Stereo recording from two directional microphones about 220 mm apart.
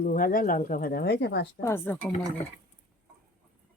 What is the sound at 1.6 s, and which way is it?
Speech, 10° left (ahead or behind).